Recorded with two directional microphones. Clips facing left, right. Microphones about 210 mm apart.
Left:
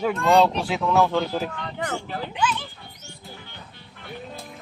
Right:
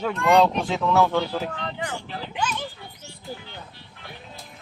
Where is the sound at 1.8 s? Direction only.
45° left (ahead or behind).